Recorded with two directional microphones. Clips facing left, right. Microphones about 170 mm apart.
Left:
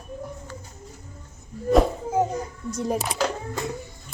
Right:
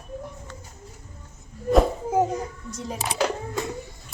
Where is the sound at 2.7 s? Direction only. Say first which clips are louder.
Left 8 dB; 45° left (ahead or behind).